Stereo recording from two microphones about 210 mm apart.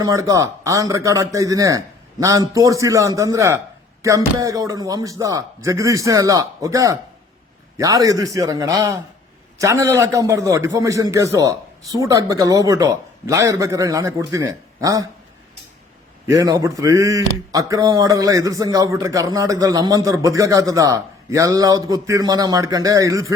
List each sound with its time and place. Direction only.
0.0 s speech: 15° right (ahead or behind)
16.2 s speech: 15° right (ahead or behind)